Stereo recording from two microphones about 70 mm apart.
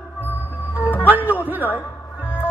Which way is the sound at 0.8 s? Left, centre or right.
Left.